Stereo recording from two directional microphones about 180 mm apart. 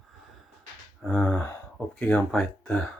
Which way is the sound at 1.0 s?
5° left (ahead or behind).